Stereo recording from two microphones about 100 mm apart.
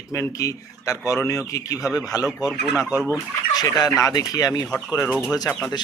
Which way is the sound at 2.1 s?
40° left (ahead or behind).